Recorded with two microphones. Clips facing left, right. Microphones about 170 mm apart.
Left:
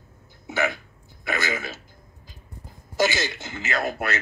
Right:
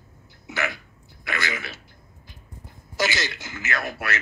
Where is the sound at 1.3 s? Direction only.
45° left (ahead or behind).